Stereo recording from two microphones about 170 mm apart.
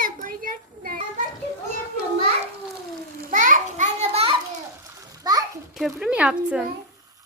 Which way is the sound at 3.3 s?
50° right (ahead or behind).